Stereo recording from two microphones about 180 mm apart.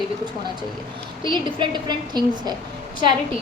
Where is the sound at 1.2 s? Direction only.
25° right (ahead or behind).